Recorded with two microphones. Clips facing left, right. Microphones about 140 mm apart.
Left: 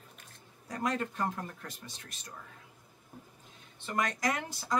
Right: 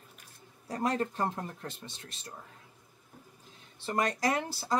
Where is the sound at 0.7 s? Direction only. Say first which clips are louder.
Right 3 dB; 30° right (ahead or behind).